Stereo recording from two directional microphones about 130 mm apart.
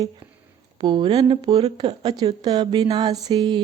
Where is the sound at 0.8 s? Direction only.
40° right (ahead or behind).